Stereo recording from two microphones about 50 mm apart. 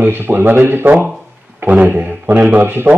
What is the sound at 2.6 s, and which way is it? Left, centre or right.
Speech, right.